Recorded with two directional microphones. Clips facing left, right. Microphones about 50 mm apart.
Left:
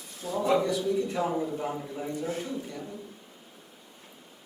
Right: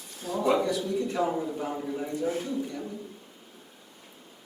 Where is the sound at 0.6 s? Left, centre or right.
Centre.